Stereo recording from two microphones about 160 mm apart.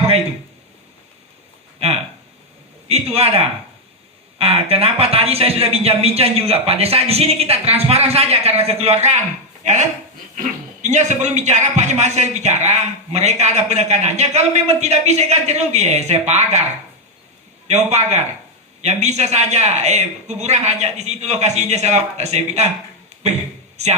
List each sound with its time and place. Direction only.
2.9 s a man's voice: 40° right (ahead or behind)
10.8 s a man's voice: 45° right (ahead or behind)
17.7 s a man's voice: 45° right (ahead or behind)
23.7 s speech: 45° right (ahead or behind)